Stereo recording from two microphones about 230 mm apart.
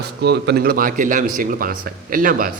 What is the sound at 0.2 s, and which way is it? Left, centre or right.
Speech, right.